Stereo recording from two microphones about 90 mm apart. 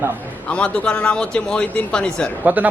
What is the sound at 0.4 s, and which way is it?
Speech, 15° left (ahead or behind).